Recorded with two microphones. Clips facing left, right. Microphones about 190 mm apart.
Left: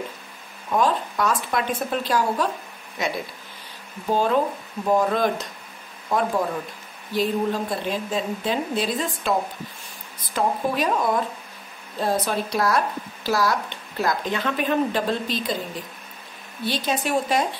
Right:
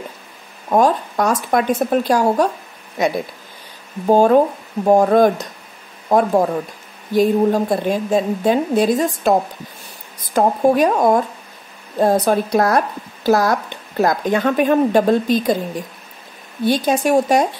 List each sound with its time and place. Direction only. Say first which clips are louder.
0.7 s speech: right 6 dB; 45° right (ahead or behind)
4.0 s speech: right 9 dB; 50° right (ahead or behind)
10.3 s speech: right 9 dB; 45° right (ahead or behind)